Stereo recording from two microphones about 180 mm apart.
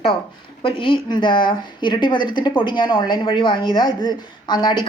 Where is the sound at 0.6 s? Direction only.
25° left (ahead or behind).